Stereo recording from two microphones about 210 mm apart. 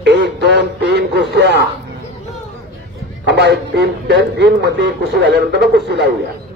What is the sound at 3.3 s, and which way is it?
Speech, 55° right (ahead or behind).